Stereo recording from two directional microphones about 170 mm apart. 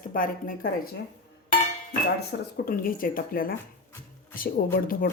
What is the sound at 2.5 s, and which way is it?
Speech, 60° left (ahead or behind).